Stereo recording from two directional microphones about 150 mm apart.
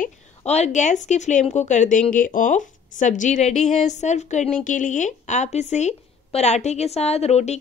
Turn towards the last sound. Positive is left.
turn(degrees=45)  # may be behind; listen again after turning